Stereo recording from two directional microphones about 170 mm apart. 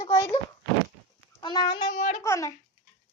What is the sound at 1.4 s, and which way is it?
Speech, 25° left (ahead or behind).